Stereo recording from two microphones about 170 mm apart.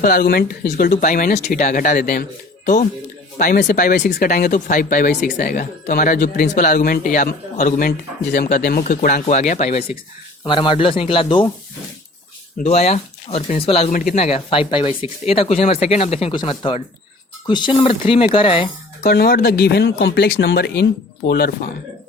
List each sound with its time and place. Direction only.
0.0 s a man's voice: 55° left (ahead or behind)
4.0 s speech: 90° left
4.3 s a man's voice: 50° left (ahead or behind)
10.4 s speech: 30° left (ahead or behind)
12.6 s speech: 40° left (ahead or behind)
13.9 s a man's voice: 50° left (ahead or behind)
14.2 s speech: 35° left (ahead or behind)
19.0 s speech: 70° left (ahead or behind)